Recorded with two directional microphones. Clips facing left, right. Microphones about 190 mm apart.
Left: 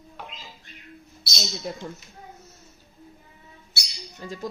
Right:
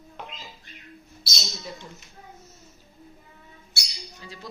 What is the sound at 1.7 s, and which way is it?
Speech, 60° left (ahead or behind).